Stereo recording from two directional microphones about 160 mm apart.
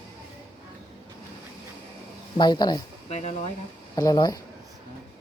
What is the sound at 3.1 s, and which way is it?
Speech, 45° left (ahead or behind).